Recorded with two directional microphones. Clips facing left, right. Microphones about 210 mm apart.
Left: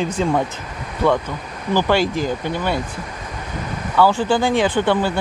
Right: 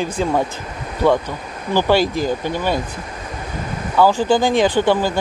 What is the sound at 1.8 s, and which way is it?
Speech, 10° right (ahead or behind).